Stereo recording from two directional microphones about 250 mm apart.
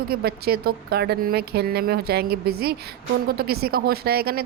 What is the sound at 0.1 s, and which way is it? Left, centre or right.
Speech, right.